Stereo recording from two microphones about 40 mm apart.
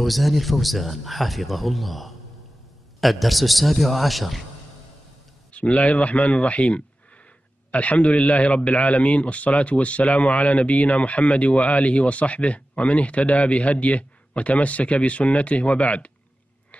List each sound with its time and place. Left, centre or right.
0.0 s speech: centre
5.5 s a man's voice: left